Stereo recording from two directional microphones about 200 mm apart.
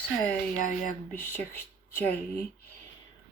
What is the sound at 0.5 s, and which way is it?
Speech, 40° left (ahead or behind).